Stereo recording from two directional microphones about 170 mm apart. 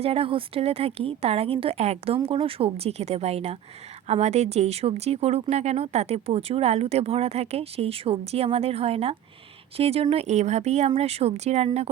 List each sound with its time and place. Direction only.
0.0 s speech: 35° right (ahead or behind)